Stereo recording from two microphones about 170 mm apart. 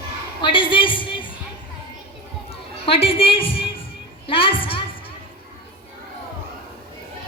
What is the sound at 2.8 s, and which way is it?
A woman's voice, 35° left (ahead or behind).